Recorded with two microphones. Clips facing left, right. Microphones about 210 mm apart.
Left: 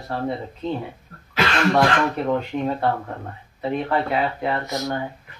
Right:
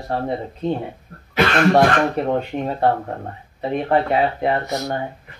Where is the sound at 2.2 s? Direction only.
35° right (ahead or behind).